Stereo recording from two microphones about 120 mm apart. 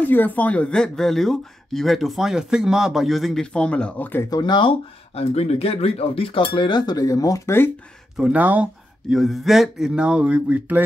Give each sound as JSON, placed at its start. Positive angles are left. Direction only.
{"t": 0.0, "sound": "speech", "side_deg": 15}
{"t": 4.3, "sound": "speech", "side_deg": 40}
{"t": 8.2, "sound": "speech", "side_deg": -10}
{"t": 9.1, "sound": "speech", "side_deg": 0}